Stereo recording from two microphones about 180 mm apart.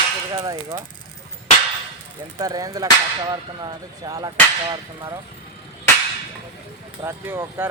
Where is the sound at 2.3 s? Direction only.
20° right (ahead or behind).